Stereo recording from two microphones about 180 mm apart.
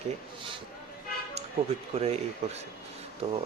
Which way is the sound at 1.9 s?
35° right (ahead or behind).